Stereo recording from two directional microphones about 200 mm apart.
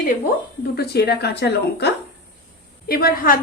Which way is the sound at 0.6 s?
50° left (ahead or behind).